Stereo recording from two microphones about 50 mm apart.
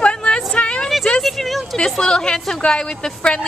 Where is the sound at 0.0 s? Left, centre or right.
Left.